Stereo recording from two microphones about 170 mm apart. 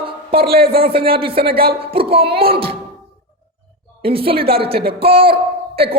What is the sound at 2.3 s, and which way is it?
Speech, 65° right (ahead or behind).